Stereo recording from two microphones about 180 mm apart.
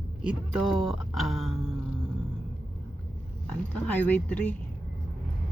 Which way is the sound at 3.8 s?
10° left (ahead or behind).